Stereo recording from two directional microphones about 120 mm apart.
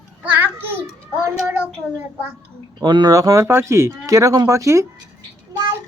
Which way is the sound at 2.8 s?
35° right (ahead or behind).